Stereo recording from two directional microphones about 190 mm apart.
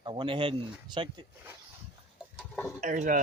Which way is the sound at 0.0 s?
25° right (ahead or behind).